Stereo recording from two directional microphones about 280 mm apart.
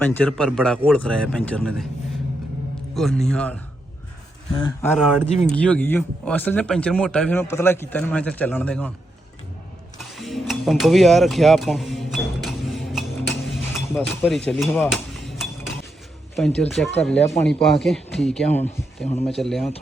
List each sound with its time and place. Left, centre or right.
0.0 s speech: centre
2.9 s speech: centre
4.5 s speech: centre
5.5 s speech: centre
10.0 s a sound: centre
16.3 s speech: centre